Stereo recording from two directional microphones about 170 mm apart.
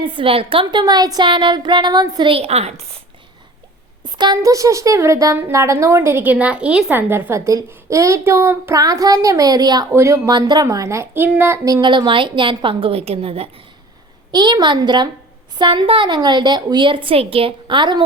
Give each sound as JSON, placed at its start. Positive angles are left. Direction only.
{"t": 0.0, "sound": "speech", "side_deg": -30}
{"t": 4.2, "sound": "speech", "side_deg": -20}